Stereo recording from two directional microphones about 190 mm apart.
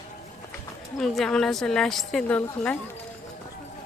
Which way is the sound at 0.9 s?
Centre (ahead or behind).